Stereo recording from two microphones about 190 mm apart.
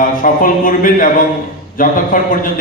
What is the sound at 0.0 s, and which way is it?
A man's voice, 45° left (ahead or behind).